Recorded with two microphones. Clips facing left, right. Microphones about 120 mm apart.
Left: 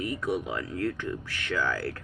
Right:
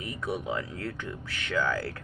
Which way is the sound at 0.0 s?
20° right (ahead or behind).